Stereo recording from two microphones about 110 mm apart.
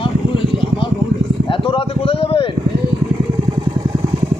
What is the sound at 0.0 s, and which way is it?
Vehicle, 50° left (ahead or behind).